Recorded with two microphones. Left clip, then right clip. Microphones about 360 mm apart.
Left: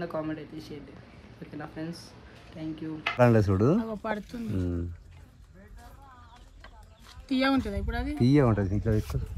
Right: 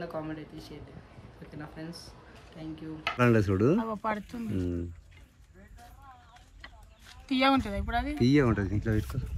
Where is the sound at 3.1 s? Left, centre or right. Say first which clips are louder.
Left 3 dB; centre.